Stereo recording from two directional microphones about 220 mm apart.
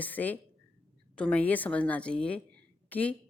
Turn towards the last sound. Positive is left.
turn(degrees=5)  # may be behind; listen again after turning